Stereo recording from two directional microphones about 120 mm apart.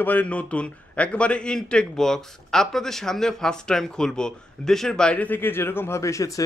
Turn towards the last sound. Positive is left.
turn(degrees=25)  # may be behind; listen again after turning